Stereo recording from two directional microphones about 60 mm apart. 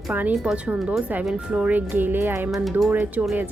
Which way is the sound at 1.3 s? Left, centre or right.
Right.